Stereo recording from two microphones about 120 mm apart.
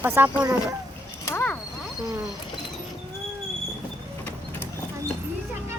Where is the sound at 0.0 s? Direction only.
20° right (ahead or behind).